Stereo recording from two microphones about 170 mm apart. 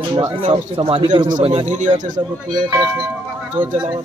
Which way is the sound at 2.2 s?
35° right (ahead or behind).